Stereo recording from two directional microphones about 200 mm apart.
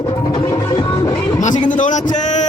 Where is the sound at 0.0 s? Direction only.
25° left (ahead or behind).